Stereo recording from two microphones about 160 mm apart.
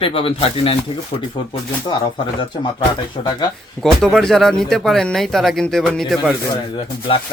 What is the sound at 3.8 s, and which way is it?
Speech, 5° left (ahead or behind).